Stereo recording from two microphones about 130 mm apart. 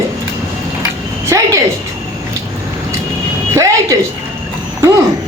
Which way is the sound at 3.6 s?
25° right (ahead or behind).